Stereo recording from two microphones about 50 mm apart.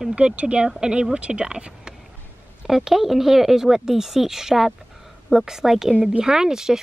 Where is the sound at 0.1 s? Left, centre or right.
Right.